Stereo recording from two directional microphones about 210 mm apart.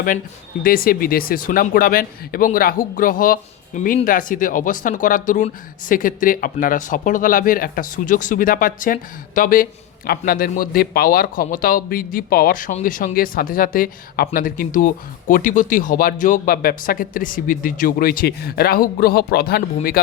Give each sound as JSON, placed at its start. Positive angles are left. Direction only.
{"t": 0.6, "sound": "a man's voice", "side_deg": 45}